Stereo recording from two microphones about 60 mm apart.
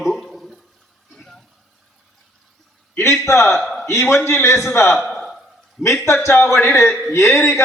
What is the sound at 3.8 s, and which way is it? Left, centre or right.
A man's voice, left.